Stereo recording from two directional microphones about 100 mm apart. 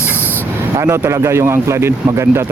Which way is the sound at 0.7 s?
30° right (ahead or behind).